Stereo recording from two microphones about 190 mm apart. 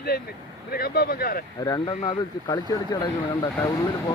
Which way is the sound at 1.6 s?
20° left (ahead or behind).